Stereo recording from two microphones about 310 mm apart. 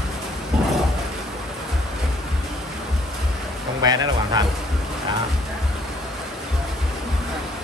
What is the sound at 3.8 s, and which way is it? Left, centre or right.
Speech, centre.